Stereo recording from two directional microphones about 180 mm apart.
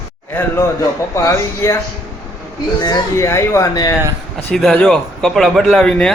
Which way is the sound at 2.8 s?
20° left (ahead or behind).